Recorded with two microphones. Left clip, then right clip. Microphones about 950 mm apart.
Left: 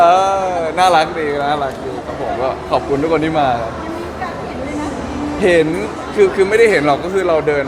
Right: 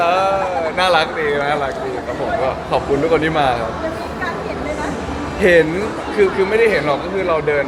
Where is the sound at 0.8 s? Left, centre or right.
Centre.